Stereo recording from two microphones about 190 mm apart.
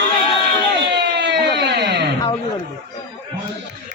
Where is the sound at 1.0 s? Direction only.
65° right (ahead or behind).